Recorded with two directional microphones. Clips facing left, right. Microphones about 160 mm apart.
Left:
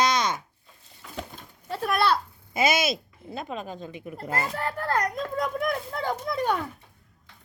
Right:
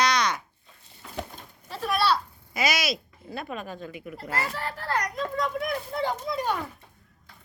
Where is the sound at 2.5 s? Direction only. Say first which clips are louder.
Left 3 dB; 25° left (ahead or behind).